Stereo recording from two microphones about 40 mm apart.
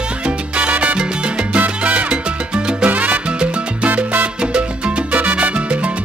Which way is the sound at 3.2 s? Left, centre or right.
Right.